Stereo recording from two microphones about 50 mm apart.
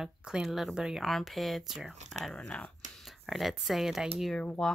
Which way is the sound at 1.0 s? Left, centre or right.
Centre.